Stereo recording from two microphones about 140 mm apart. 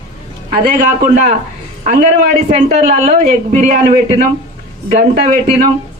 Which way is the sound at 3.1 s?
55° right (ahead or behind).